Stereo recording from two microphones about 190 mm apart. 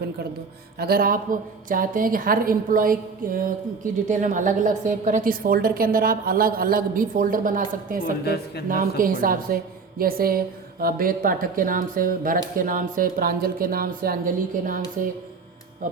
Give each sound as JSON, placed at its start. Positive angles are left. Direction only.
{"t": 0.8, "sound": "a woman's voice", "side_deg": -50}
{"t": 8.2, "sound": "speech", "side_deg": 55}
{"t": 8.7, "sound": "a woman's voice", "side_deg": -45}
{"t": 15.8, "sound": "a woman's voice", "side_deg": -45}